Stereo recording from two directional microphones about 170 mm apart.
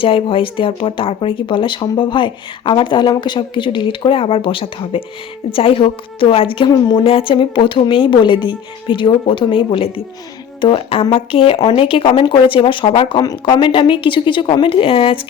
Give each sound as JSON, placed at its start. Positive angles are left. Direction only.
{"t": 0.0, "sound": "speech", "side_deg": 30}